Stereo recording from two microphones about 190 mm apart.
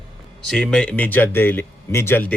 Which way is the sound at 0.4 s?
5° left (ahead or behind).